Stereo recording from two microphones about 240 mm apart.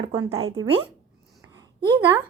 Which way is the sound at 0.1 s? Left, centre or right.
Right.